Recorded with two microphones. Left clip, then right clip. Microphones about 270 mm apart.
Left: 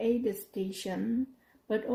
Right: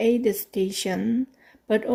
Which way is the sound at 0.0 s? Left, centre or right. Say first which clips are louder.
Right 8 dB; right.